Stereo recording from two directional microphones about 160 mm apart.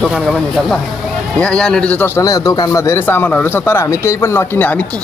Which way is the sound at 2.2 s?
20° left (ahead or behind).